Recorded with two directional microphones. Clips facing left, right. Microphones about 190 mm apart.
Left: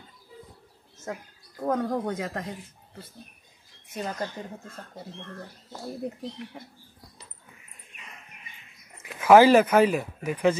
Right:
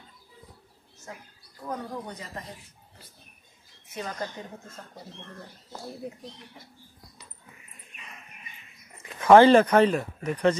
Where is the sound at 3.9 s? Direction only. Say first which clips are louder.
Left 2 dB; 30° left (ahead or behind).